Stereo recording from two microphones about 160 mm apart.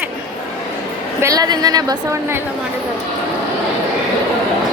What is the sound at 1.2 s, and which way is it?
Speech, 20° right (ahead or behind).